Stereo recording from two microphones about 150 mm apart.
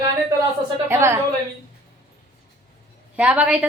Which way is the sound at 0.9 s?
15° right (ahead or behind).